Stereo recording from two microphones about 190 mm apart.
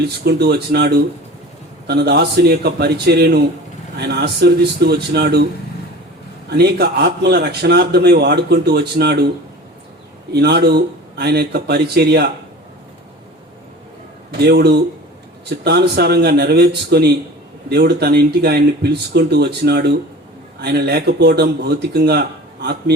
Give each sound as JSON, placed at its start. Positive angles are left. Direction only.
{"t": 0.0, "sound": "speech", "side_deg": -60}
{"t": 6.5, "sound": "speech", "side_deg": -60}
{"t": 10.3, "sound": "speech", "side_deg": -60}
{"t": 14.3, "sound": "speech", "side_deg": -55}